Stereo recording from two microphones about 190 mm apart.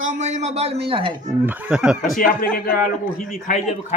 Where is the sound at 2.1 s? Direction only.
45° left (ahead or behind).